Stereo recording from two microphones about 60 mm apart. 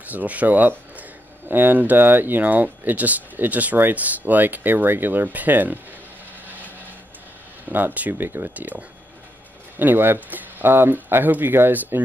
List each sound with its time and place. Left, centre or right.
0.0 s speech: right
7.7 s speech: right